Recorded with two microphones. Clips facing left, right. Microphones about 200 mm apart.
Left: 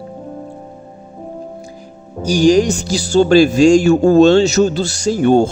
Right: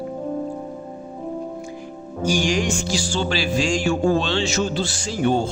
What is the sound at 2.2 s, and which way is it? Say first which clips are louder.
Speech: left 10 dB; 35° left (ahead or behind).